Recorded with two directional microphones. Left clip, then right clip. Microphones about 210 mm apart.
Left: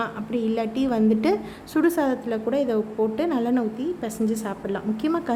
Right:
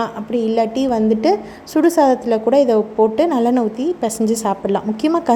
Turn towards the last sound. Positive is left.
turn(degrees=-15)  # may be behind; listen again after turning